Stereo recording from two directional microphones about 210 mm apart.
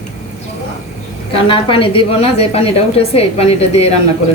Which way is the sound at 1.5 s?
25° left (ahead or behind).